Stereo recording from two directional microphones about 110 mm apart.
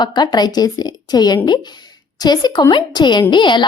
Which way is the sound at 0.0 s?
40° left (ahead or behind).